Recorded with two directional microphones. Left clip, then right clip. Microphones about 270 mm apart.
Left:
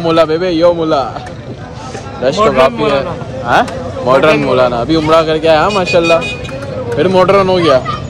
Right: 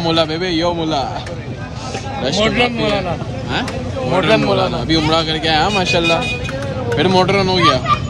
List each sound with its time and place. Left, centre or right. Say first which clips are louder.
0.0 s speech: left 6 dB; centre
2.2 s speech: left 7 dB; centre
3.0 s a man's voice: left 4 dB; left
4.2 s speech: left 2 dB; centre